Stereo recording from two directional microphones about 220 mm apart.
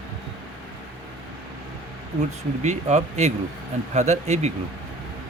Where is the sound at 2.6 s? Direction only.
30° right (ahead or behind).